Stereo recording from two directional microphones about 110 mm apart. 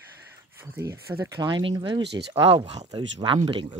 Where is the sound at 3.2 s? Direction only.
50° right (ahead or behind).